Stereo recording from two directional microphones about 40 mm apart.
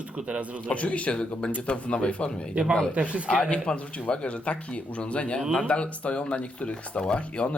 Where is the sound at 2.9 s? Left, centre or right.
Right.